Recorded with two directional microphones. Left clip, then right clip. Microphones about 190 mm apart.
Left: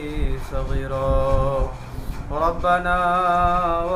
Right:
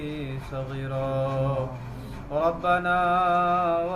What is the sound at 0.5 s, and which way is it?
Music, 20° right (ahead or behind).